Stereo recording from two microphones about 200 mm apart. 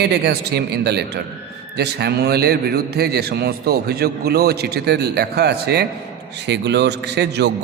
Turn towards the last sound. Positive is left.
turn(degrees=-55)  # may be behind; listen again after turning